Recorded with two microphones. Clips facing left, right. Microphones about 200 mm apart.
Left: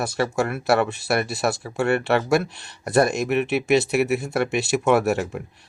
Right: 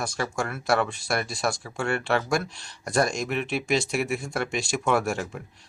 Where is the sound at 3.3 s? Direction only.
65° left (ahead or behind).